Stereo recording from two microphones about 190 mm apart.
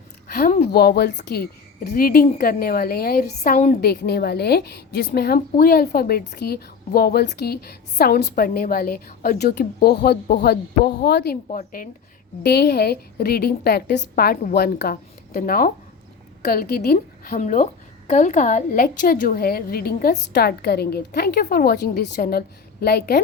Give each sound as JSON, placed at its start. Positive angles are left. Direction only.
{"t": 0.3, "sound": "a woman's voice", "side_deg": 50}
{"t": 3.8, "sound": "a woman's voice", "side_deg": 55}
{"t": 11.4, "sound": "a woman's voice", "side_deg": 45}
{"t": 12.4, "sound": "a woman's voice", "side_deg": 55}